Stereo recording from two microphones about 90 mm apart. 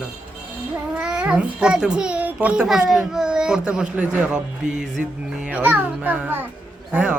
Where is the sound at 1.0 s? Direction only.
10° right (ahead or behind).